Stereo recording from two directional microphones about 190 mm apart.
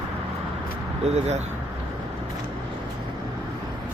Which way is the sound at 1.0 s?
35° right (ahead or behind).